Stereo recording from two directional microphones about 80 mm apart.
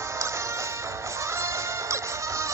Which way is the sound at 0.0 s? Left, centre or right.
Right.